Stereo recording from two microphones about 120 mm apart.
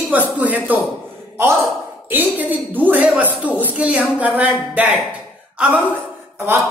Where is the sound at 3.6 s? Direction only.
15° right (ahead or behind).